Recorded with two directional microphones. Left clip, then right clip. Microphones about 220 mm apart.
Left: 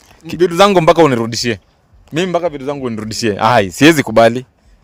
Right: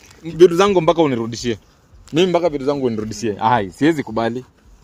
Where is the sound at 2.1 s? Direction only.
30° left (ahead or behind).